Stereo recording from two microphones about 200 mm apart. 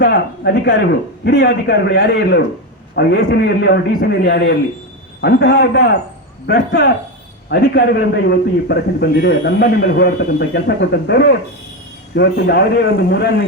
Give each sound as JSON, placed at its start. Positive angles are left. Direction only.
{"t": 0.0, "sound": "a man's voice", "side_deg": 55}